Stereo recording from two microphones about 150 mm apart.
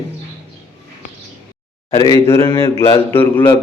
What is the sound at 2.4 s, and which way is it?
Speech, 35° left (ahead or behind).